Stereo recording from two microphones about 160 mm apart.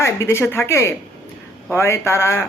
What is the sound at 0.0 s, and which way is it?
Speech, 15° left (ahead or behind).